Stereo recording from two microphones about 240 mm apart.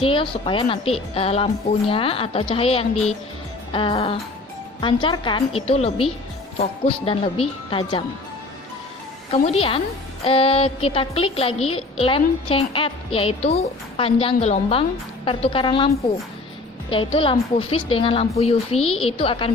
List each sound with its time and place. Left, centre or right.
0.0 s a woman's voice: left
9.3 s a woman's voice: left
16.9 s a woman's voice: left